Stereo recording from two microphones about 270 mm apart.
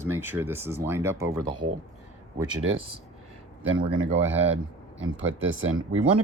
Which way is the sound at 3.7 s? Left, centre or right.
Right.